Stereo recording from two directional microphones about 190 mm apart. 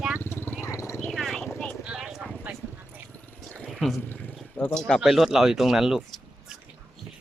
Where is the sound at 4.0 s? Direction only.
10° left (ahead or behind).